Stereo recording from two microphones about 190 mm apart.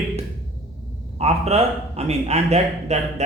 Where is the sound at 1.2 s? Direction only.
35° right (ahead or behind).